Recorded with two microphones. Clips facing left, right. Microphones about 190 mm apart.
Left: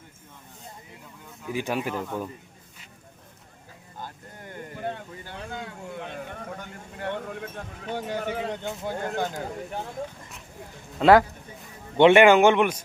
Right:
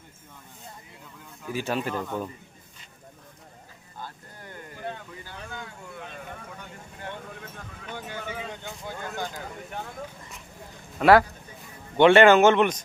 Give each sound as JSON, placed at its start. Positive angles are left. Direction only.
{"t": 1.5, "sound": "speech", "side_deg": 15}
{"t": 6.0, "sound": "a sound", "side_deg": 55}
{"t": 7.0, "sound": "vehicle", "side_deg": 60}
{"t": 7.9, "sound": "speech", "side_deg": 50}
{"t": 11.0, "sound": "speech", "side_deg": 20}